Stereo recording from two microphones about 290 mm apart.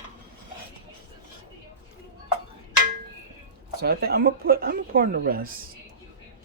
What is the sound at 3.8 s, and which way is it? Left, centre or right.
Speech, right.